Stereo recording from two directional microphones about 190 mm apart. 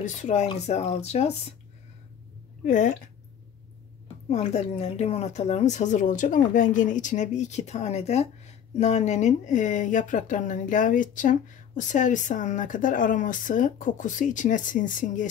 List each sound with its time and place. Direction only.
0.0 s speech: 40° left (ahead or behind)
2.6 s speech: 40° left (ahead or behind)
4.3 s speech: 35° left (ahead or behind)